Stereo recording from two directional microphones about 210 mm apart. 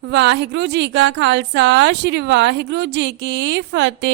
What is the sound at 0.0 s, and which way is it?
Speech, 55° right (ahead or behind).